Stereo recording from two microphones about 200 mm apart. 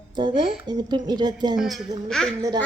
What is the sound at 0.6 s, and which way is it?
Speech, 20° right (ahead or behind).